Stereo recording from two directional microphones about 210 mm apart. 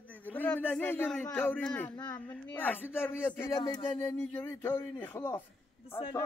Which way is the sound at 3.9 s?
10° left (ahead or behind).